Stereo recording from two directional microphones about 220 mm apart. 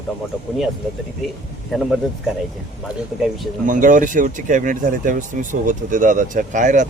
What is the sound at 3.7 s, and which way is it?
Speech, 35° right (ahead or behind).